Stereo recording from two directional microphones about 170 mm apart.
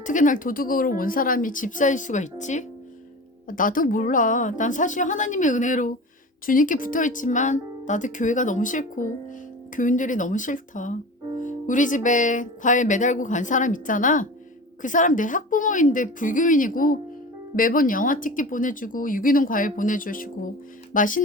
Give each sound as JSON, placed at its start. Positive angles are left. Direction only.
{"t": 0.0, "sound": "speech", "side_deg": 50}